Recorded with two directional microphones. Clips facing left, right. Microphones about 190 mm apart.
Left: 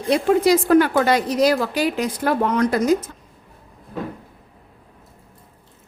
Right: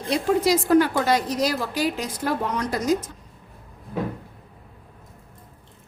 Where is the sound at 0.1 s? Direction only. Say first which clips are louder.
Left 4 dB; 60° left (ahead or behind).